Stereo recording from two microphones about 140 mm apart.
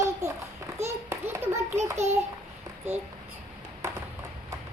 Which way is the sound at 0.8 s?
20° right (ahead or behind).